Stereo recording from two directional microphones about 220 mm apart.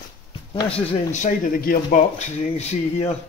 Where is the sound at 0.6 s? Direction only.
25° left (ahead or behind).